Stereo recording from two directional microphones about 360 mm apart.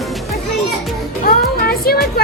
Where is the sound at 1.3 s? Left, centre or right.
Left.